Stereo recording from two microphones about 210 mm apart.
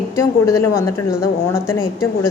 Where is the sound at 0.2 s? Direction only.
15° left (ahead or behind).